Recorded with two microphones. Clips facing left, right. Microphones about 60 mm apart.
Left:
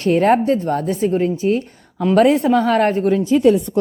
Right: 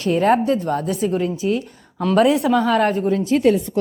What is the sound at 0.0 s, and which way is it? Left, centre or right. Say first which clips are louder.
A woman's voice: left 2 dB; left.